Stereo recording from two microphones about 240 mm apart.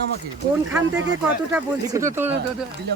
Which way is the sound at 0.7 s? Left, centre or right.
Centre.